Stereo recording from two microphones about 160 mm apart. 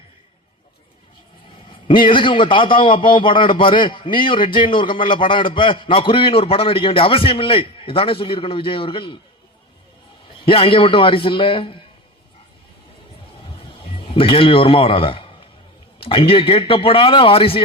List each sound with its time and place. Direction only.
2.0 s a man's voice: 30° left (ahead or behind)
10.4 s a man's voice: 35° left (ahead or behind)
14.1 s a man's voice: 35° left (ahead or behind)